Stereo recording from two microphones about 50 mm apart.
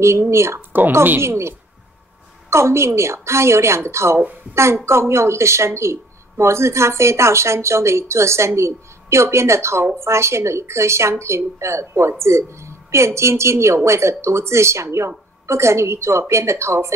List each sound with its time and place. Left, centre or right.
0.0 s speech: right
0.6 s speech: right
1.2 s a woman's voice: right
2.5 s speech: right